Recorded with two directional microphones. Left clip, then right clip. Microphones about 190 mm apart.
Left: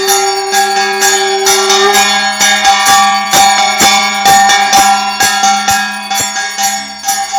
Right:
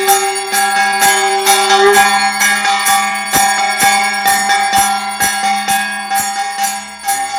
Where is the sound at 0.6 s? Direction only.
30° left (ahead or behind); by 6.2 s 55° left (ahead or behind).